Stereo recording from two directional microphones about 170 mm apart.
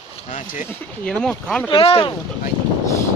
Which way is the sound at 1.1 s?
5° left (ahead or behind).